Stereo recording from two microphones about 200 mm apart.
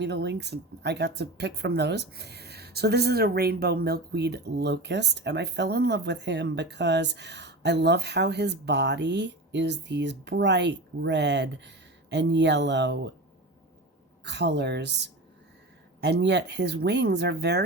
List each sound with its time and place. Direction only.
0.0 s speech: 55° right (ahead or behind)
14.3 s speech: 60° right (ahead or behind)